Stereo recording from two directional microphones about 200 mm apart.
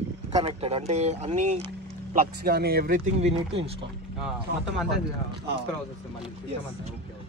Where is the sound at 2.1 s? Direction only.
50° right (ahead or behind).